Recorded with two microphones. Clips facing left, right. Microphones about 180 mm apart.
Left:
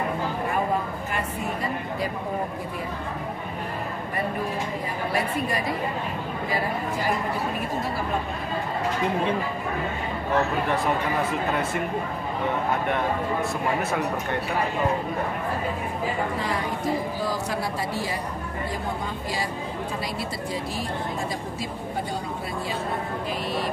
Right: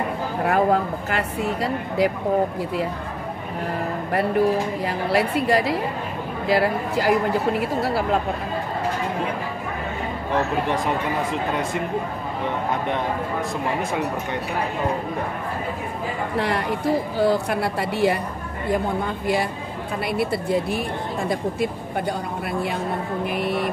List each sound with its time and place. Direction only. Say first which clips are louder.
0.4 s speech: right 9 dB; 75° right (ahead or behind)
4.8 s a woman's voice: right 5 dB; 80° right
16.3 s speech: right 4 dB; 70° right (ahead or behind)
20.2 s speech: right 8 dB; 60° right (ahead or behind)
23.3 s speech: right 5 dB; 60° right (ahead or behind)